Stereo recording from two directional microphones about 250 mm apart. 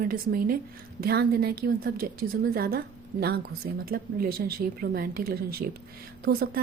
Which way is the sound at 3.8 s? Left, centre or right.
Right.